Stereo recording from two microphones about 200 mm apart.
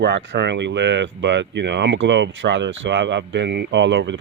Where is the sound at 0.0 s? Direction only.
65° right (ahead or behind).